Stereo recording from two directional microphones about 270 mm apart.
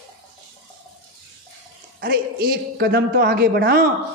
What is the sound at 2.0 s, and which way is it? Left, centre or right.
A man's voice, right.